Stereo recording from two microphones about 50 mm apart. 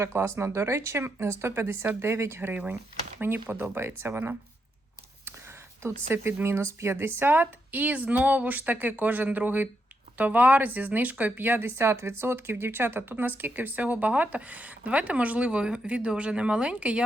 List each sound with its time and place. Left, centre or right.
0.0 s speech: right
1.0 s speech: right
3.2 s speech: right
5.8 s speech: right
11.6 s speech: right